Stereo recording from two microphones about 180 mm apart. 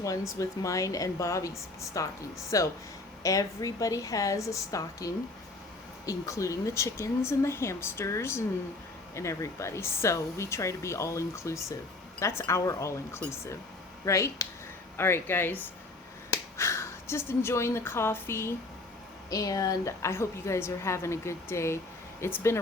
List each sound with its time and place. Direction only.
0.3 s a woman's voice: 20° left (ahead or behind)